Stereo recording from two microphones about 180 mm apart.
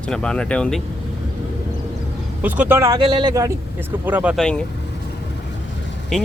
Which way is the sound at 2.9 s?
30° right (ahead or behind).